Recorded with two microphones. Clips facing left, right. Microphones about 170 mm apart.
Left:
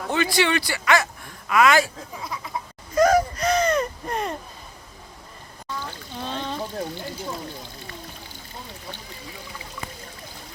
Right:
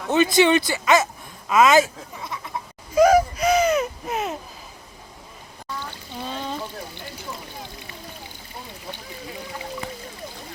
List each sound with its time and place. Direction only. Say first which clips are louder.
0.1 s speech: right 5 dB; 20° right (ahead or behind)
2.1 s a sound: left 1 dB; centre (ahead or behind)
6.2 s trickle: even; 5° right (ahead or behind)